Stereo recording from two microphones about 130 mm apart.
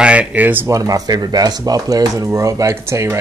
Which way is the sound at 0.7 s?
25° right (ahead or behind).